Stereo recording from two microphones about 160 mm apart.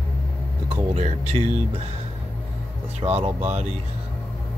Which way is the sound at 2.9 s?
40° right (ahead or behind).